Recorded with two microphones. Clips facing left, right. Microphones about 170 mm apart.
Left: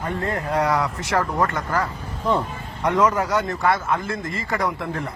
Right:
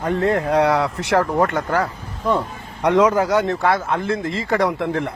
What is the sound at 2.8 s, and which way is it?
Speech, 85° right.